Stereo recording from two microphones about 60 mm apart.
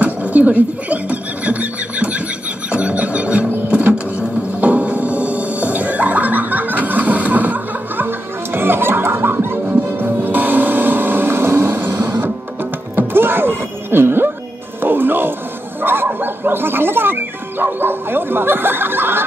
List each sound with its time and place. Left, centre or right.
0.0 s a sound: right
2.7 s music: right
15.8 s speech: right